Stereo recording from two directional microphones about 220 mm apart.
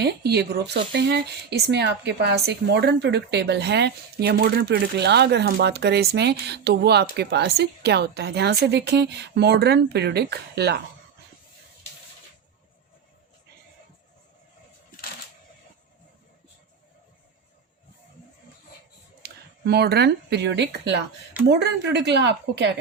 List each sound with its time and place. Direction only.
0.0 s speech: 45° right (ahead or behind)
19.2 s speech: 50° right (ahead or behind)